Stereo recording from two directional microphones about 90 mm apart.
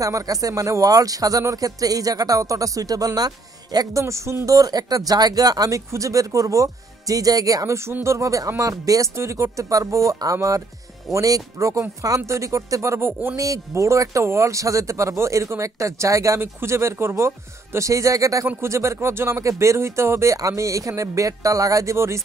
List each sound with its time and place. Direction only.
0.0 s speech: 40° right (ahead or behind)
4.0 s speech: 30° right (ahead or behind)